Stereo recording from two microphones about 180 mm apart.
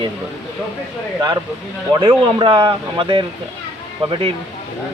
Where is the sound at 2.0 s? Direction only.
30° right (ahead or behind).